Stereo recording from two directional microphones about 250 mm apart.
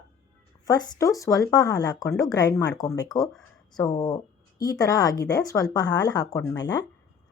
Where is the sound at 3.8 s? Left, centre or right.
Centre.